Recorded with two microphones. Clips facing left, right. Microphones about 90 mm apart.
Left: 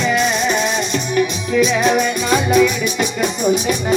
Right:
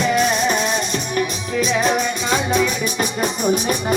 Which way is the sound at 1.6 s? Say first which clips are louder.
Left 4 dB; 35° right (ahead or behind).